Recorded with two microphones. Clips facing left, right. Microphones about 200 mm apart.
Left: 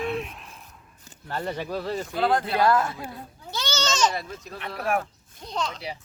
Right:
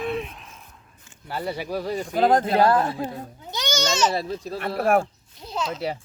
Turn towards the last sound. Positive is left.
turn(degrees=-5)  # may be behind; listen again after turning